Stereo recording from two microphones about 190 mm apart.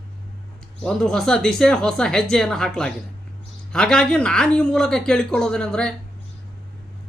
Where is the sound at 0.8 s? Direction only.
5° left (ahead or behind).